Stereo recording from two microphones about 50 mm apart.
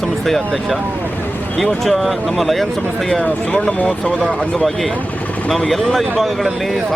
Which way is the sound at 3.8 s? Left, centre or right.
Centre.